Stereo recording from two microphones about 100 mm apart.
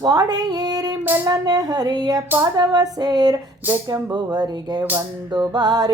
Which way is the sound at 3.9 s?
40° right (ahead or behind).